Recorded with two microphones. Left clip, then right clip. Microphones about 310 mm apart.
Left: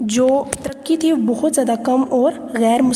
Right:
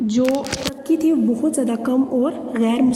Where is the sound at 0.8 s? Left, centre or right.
Left.